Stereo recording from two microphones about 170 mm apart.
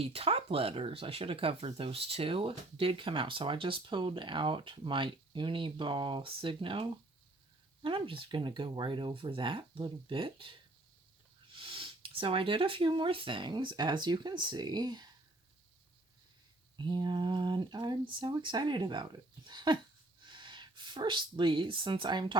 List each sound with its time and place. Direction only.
0.0 s speech: 35° right (ahead or behind)
16.7 s speech: 30° right (ahead or behind)